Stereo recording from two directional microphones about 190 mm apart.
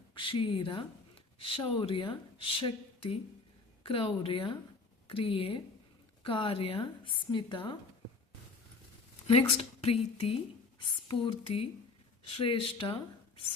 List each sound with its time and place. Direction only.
0.1 s speech: 25° left (ahead or behind)
9.5 s a woman's voice: 30° left (ahead or behind)